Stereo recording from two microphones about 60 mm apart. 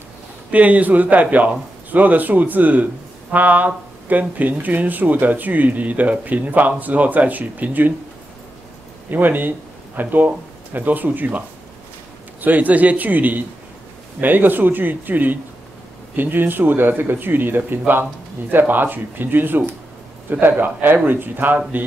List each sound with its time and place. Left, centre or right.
0.5 s speech: right
9.1 s speech: right